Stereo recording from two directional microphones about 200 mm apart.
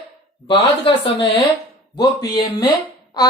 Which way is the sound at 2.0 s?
20° left (ahead or behind).